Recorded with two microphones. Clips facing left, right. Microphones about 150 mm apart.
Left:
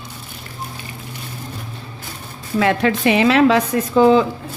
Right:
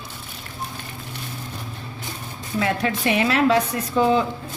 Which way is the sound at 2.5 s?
90° left.